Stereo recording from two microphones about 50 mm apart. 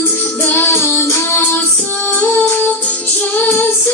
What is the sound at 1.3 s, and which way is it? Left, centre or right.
Child singing, left.